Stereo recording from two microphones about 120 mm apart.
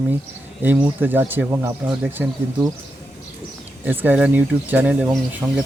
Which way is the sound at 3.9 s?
10° right (ahead or behind).